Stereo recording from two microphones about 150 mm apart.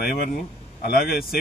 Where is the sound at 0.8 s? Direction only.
90° left.